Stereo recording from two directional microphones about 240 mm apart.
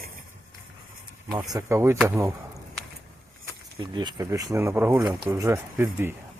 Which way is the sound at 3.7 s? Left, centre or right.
Centre.